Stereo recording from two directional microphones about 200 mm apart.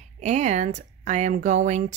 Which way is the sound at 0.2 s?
35° right (ahead or behind).